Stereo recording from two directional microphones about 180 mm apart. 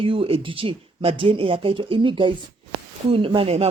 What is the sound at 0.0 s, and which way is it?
A man's voice, 30° right (ahead or behind).